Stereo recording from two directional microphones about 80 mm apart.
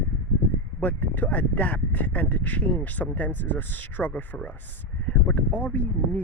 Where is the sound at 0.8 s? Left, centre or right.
Left.